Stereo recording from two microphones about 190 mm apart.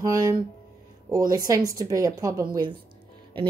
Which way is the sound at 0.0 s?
15° right (ahead or behind).